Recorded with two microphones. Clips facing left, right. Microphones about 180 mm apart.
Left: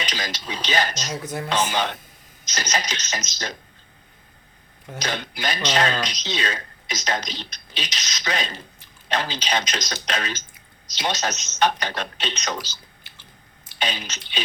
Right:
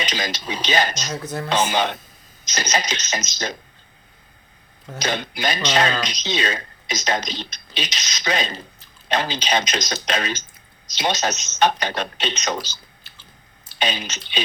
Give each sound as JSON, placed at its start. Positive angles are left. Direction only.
{"t": 0.0, "sound": "speech", "side_deg": -20}
{"t": 1.1, "sound": "speech", "side_deg": 15}
{"t": 1.5, "sound": "speech", "side_deg": -20}
{"t": 4.9, "sound": "speech", "side_deg": -20}
{"t": 13.7, "sound": "speech", "side_deg": -20}